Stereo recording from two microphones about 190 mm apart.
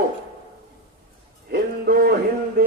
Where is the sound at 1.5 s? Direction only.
55° right (ahead or behind).